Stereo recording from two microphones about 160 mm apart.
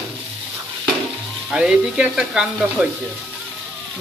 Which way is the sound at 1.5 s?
5° right (ahead or behind).